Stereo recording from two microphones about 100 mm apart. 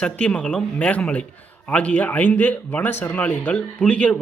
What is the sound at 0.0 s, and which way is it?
A man's voice, 15° left (ahead or behind).